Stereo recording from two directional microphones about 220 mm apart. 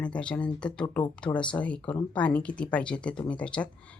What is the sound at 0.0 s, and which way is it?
Speech, 5° left (ahead or behind).